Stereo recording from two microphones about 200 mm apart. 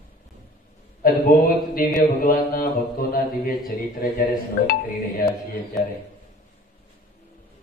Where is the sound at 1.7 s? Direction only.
45° left (ahead or behind).